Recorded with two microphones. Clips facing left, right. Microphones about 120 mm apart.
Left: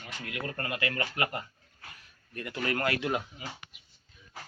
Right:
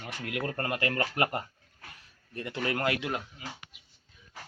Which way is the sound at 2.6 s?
20° right (ahead or behind).